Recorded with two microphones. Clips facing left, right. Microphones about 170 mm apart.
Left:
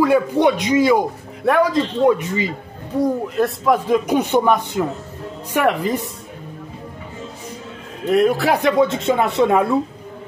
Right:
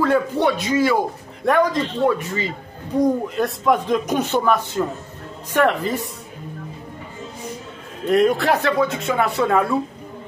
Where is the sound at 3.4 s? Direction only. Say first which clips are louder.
Left 5 dB; 5° left (ahead or behind).